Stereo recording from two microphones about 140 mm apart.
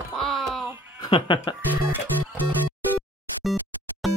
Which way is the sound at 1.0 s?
35° left (ahead or behind).